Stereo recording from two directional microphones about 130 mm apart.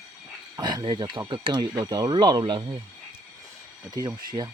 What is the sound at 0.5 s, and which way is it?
Speech, 30° right (ahead or behind).